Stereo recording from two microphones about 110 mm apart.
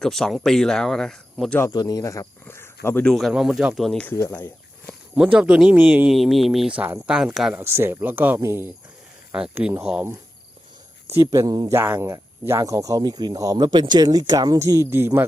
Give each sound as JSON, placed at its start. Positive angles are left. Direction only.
{"t": 0.0, "sound": "speech", "side_deg": 5}
{"t": 1.5, "sound": "a man's voice", "side_deg": 30}
{"t": 2.4, "sound": "a sound", "side_deg": 20}
{"t": 3.0, "sound": "speech", "side_deg": 0}
{"t": 4.0, "sound": "speech", "side_deg": 20}
{"t": 5.1, "sound": "a man's voice", "side_deg": -10}
{"t": 6.1, "sound": "speech", "side_deg": 0}
{"t": 7.5, "sound": "a man's voice", "side_deg": -20}
{"t": 11.1, "sound": "speech", "side_deg": -25}
{"t": 11.7, "sound": "speech", "side_deg": -20}